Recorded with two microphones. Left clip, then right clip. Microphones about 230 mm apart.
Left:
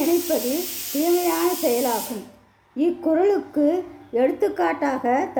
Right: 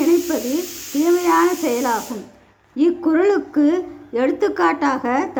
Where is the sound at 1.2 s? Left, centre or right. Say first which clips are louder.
Right 5 dB; centre.